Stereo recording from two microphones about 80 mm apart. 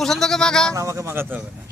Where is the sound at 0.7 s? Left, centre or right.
Right.